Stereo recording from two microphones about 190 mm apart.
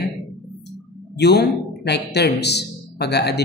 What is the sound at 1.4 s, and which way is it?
Speech, 60° left (ahead or behind).